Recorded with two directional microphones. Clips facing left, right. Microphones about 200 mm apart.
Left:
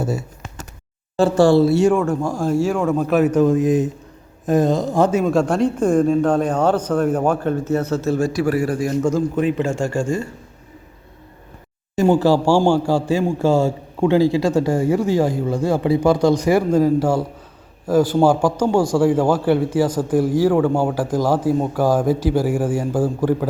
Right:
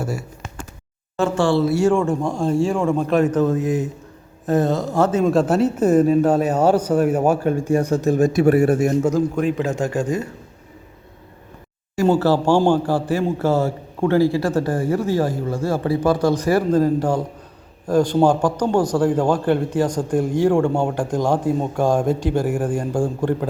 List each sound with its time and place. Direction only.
0.0 s speech: 20° left (ahead or behind)
1.1 s speech: 35° left (ahead or behind)
1.6 s speech: 25° left (ahead or behind)
1.9 s a man's voice: centre (ahead or behind)
5.2 s a man's voice: centre (ahead or behind); by 9.0 s 25° right (ahead or behind)
9.0 s a man's voice: centre (ahead or behind)
11.9 s a man's voice: 15° left (ahead or behind)